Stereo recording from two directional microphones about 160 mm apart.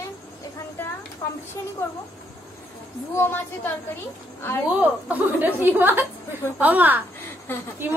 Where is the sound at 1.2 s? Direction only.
30° left (ahead or behind).